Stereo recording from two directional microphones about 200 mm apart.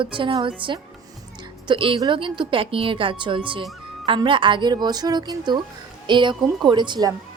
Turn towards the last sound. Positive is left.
turn(degrees=-20)  # may be behind; listen again after turning